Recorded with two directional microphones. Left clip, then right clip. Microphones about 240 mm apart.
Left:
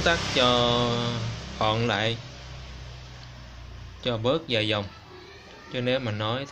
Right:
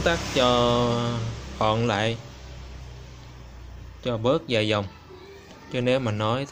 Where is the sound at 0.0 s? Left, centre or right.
Centre.